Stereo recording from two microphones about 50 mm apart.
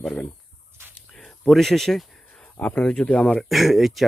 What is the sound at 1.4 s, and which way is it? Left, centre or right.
Speech, centre.